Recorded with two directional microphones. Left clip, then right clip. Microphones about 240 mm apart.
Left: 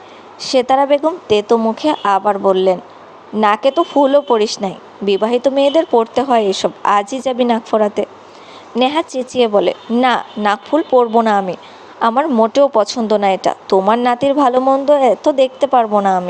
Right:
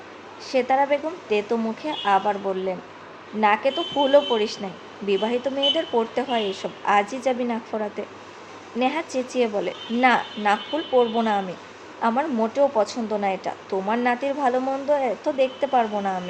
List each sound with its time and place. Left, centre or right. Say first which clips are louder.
0.3 s speech: left 8 dB; left